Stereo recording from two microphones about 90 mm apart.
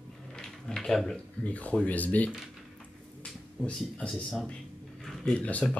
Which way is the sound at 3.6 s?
5° left (ahead or behind).